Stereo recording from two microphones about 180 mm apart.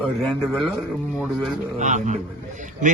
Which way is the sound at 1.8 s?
45° right (ahead or behind).